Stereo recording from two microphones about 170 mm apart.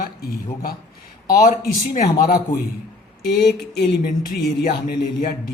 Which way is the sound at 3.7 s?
80° left.